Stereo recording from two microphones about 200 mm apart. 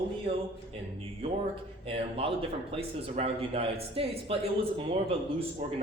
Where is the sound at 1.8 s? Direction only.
30° right (ahead or behind).